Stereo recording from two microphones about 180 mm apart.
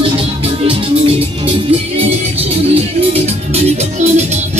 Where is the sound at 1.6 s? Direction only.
35° right (ahead or behind).